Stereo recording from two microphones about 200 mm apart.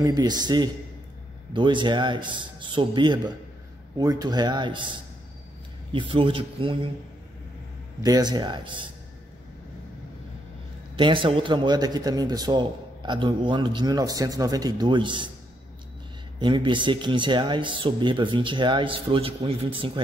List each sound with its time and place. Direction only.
0.0 s a man's voice: 20° right (ahead or behind)
8.0 s a man's voice: 20° right (ahead or behind)
11.0 s a man's voice: 25° right (ahead or behind)
16.3 s a man's voice: 25° right (ahead or behind)